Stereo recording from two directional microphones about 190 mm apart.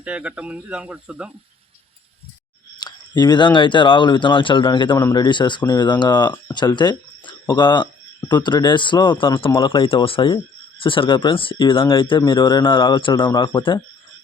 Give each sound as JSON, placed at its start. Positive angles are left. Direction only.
{"t": 0.0, "sound": "speech", "side_deg": -5}
{"t": 2.7, "sound": "speech", "side_deg": 20}